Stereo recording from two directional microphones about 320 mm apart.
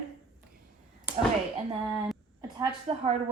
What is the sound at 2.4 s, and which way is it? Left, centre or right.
Speech, centre.